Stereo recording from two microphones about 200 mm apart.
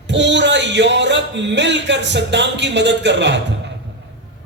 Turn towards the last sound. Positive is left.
turn(degrees=-60)  # may be behind; listen again after turning